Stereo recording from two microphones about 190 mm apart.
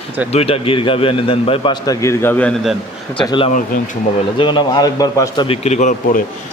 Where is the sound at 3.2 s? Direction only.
25° left (ahead or behind).